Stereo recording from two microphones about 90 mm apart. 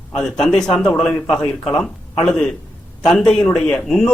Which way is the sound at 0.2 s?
5° left (ahead or behind).